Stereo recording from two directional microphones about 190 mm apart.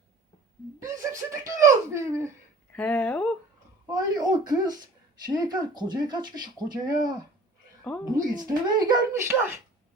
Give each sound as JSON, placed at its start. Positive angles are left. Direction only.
{"t": 1.1, "sound": "speech", "side_deg": -15}
{"t": 2.7, "sound": "speech", "side_deg": 5}
{"t": 3.9, "sound": "speech", "side_deg": -20}